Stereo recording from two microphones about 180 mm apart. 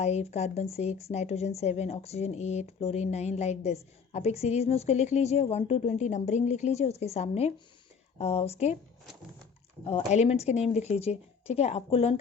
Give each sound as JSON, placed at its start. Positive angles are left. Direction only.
{"t": 0.0, "sound": "a woman's voice", "side_deg": 40}
{"t": 9.8, "sound": "a woman's voice", "side_deg": 35}